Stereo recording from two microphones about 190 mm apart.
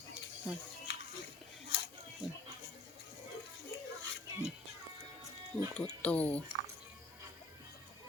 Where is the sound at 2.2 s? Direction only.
5° right (ahead or behind).